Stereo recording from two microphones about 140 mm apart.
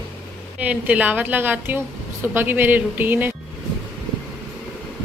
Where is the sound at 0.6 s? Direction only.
10° right (ahead or behind).